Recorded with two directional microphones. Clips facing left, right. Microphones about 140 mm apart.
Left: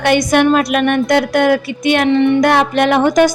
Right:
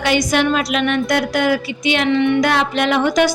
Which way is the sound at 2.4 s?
55° left (ahead or behind).